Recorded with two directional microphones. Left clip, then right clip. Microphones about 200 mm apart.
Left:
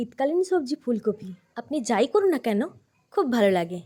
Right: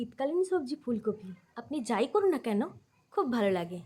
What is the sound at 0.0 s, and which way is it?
A woman's voice, 25° left (ahead or behind).